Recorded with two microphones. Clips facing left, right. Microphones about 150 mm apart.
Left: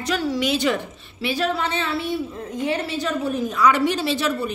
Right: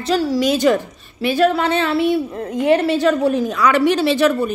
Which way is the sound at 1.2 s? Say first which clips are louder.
Right 7 dB; 55° right (ahead or behind).